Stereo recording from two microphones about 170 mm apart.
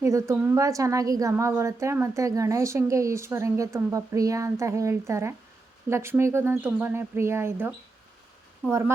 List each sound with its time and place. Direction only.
0.0 s a woman's voice: 15° right (ahead or behind)